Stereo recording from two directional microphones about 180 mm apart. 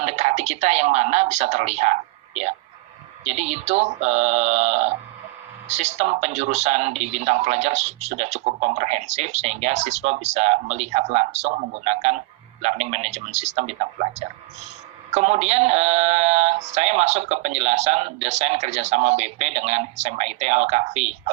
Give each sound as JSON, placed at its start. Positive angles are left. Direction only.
{"t": 0.0, "sound": "speech", "side_deg": -40}